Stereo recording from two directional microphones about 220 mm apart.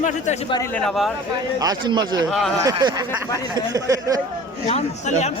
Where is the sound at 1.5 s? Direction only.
20° right (ahead or behind).